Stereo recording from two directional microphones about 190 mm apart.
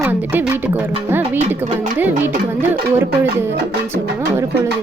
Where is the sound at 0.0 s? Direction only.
10° right (ahead or behind).